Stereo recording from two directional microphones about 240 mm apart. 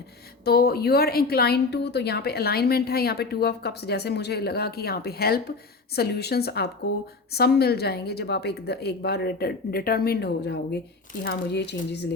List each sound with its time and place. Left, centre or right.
0.4 s a woman's voice: left